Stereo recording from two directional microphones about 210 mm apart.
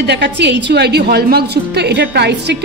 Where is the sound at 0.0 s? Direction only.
55° right (ahead or behind).